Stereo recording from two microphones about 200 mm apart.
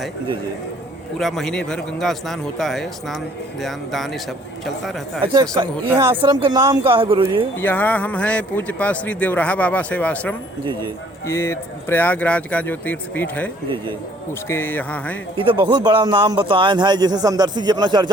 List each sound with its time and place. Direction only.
1.2 s speech: centre (ahead or behind)
5.2 s a man's voice: 20° right (ahead or behind)
7.6 s a man's voice: 10° left (ahead or behind)
15.4 s a man's voice: 25° right (ahead or behind)